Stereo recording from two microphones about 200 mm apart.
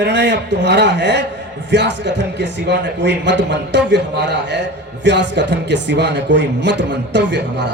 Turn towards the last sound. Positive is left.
turn(degrees=-60)  # may be behind; listen again after turning